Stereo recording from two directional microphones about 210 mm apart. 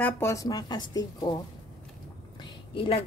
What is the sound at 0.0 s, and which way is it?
Speech, 15° left (ahead or behind).